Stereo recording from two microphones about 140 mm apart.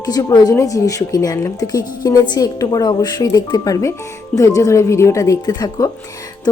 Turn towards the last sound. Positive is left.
turn(degrees=30)  # may be behind; listen again after turning